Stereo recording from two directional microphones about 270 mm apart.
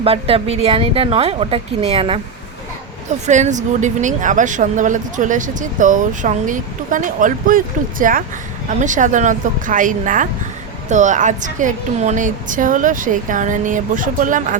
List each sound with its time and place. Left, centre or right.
0.0 s speech: right
3.2 s speech: right